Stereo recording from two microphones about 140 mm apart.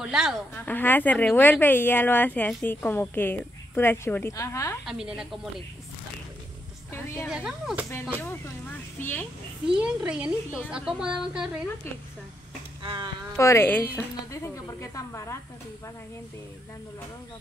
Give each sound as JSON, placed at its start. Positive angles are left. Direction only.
{"t": 0.0, "sound": "speech", "side_deg": -5}
{"t": 0.6, "sound": "speech", "side_deg": 15}
{"t": 4.8, "sound": "speech", "side_deg": -5}
{"t": 6.9, "sound": "music", "side_deg": 20}
{"t": 7.2, "sound": "a woman's voice", "side_deg": -5}
{"t": 8.2, "sound": "speech", "side_deg": 15}
{"t": 9.8, "sound": "a woman's voice", "side_deg": -5}
{"t": 12.8, "sound": "speech", "side_deg": -35}
{"t": 13.4, "sound": "a woman's voice", "side_deg": 20}